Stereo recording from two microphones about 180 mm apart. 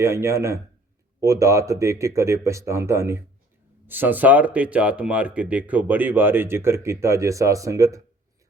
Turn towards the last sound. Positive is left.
turn(degrees=-20)  # may be behind; listen again after turning